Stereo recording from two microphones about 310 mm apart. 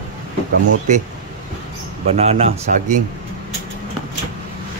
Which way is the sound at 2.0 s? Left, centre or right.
Centre.